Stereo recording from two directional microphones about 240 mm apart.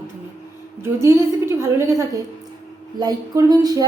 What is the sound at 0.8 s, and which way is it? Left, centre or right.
A woman's voice, centre.